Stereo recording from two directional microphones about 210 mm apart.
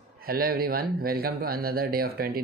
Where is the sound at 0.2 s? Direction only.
45° right (ahead or behind).